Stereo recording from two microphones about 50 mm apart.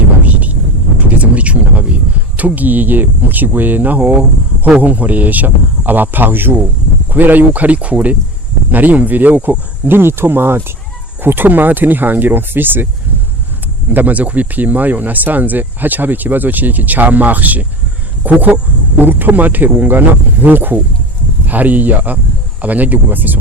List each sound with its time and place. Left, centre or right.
1.2 s a sound: right
2.3 s speech: right
13.9 s speech: right